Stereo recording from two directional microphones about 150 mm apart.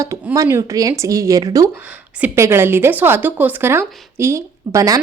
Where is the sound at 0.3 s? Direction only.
20° right (ahead or behind).